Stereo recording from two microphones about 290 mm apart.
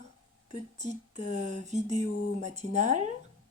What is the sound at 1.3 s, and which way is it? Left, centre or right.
Speech, right.